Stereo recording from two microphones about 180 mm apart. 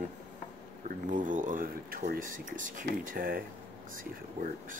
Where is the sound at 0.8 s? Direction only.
45° right (ahead or behind).